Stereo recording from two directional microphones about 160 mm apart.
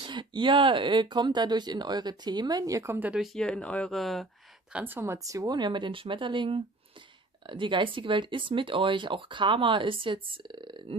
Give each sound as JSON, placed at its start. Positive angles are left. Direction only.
{"t": 0.0, "sound": "speech", "side_deg": -30}
{"t": 3.3, "sound": "speech", "side_deg": 5}
{"t": 4.7, "sound": "speech", "side_deg": -10}